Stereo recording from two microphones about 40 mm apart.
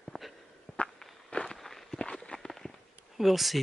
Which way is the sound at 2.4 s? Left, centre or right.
Centre.